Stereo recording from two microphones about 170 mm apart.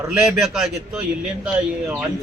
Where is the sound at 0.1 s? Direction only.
5° right (ahead or behind).